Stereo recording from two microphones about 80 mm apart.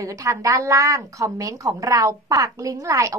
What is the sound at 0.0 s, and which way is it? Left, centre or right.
A woman's voice, right.